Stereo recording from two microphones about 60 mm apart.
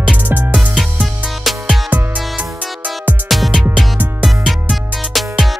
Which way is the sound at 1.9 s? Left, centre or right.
Centre.